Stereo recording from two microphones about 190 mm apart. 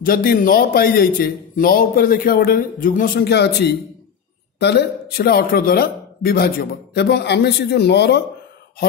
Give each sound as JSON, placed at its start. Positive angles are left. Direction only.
{"t": 0.0, "sound": "a man's voice", "side_deg": 50}